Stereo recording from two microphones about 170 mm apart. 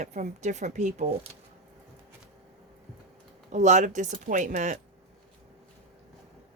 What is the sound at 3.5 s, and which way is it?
A woman's voice, 45° right (ahead or behind).